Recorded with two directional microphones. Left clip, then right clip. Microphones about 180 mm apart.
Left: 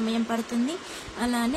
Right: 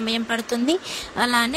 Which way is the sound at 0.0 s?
55° right (ahead or behind).